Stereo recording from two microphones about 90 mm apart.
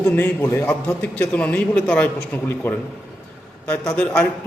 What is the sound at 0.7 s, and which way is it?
A man's voice, 15° left (ahead or behind).